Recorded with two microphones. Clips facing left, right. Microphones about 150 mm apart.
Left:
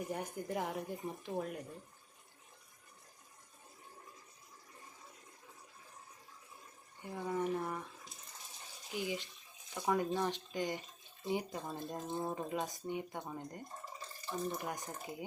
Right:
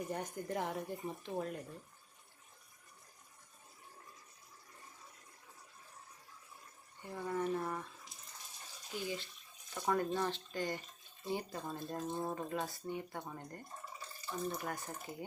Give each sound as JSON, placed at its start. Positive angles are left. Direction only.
{"t": 0.1, "sound": "speech", "side_deg": 10}
{"t": 7.0, "sound": "speech", "side_deg": 10}
{"t": 8.9, "sound": "speech", "side_deg": 15}
{"t": 12.1, "sound": "speech", "side_deg": 0}
{"t": 12.4, "sound": "speech", "side_deg": 15}